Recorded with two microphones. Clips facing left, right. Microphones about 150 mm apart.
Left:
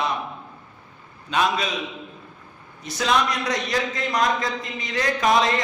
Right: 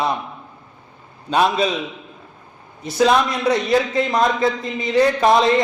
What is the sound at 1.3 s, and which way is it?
Speech, 35° right (ahead or behind).